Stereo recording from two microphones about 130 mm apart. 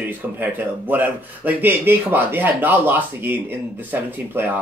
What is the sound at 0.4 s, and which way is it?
Speech, 15° right (ahead or behind).